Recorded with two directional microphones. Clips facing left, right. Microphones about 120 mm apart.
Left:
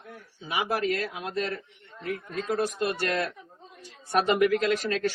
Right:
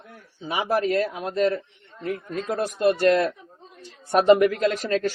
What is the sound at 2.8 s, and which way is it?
Speech, 45° right (ahead or behind).